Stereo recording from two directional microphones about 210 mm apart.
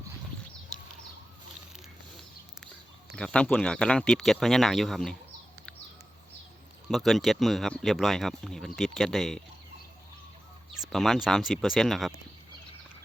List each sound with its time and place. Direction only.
3.2 s speech: 5° left (ahead or behind)
6.9 s speech: centre (ahead or behind)
10.8 s speech: centre (ahead or behind)